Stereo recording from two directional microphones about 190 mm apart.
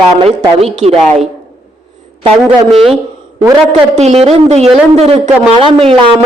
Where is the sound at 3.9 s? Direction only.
35° right (ahead or behind).